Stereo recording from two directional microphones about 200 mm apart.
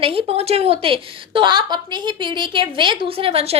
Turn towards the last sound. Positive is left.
turn(degrees=-30)  # may be behind; listen again after turning